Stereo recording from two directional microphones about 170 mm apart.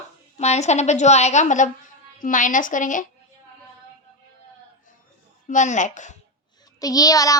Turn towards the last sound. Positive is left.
turn(degrees=20)  # may be behind; listen again after turning